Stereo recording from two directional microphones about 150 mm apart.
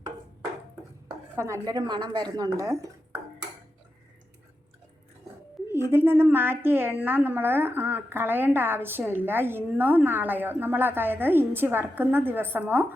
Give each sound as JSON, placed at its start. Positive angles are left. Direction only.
{"t": 1.4, "sound": "a woman's voice", "side_deg": -20}
{"t": 5.6, "sound": "a woman's voice", "side_deg": -15}